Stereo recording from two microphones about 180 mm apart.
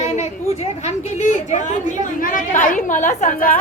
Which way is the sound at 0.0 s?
40° left (ahead or behind).